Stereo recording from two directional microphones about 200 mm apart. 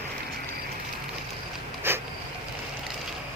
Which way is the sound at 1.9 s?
10° right (ahead or behind).